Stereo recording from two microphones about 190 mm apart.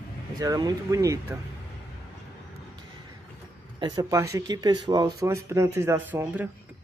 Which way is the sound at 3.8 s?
20° right (ahead or behind).